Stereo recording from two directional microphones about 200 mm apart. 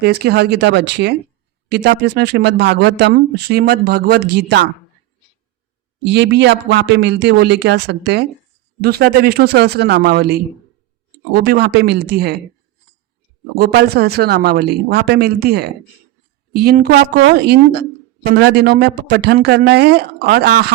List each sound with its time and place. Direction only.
0.0 s speech: 55° right (ahead or behind)
6.1 s speech: 60° right (ahead or behind)
13.6 s speech: 55° right (ahead or behind)